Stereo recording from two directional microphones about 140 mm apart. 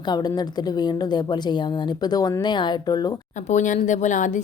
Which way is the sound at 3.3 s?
60° left (ahead or behind).